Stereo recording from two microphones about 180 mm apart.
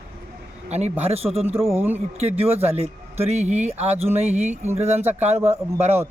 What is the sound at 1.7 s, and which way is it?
Speech, 10° right (ahead or behind).